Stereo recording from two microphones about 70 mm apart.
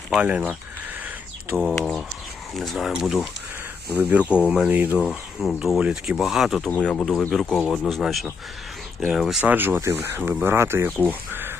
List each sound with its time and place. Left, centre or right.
0.3 s speech: right
1.5 s speech: centre
2.9 s speech: centre
4.7 s speech: right
5.0 s speech: centre
5.8 s speech: centre
6.7 s speech: centre
7.0 s speech: centre
9.4 s speech: right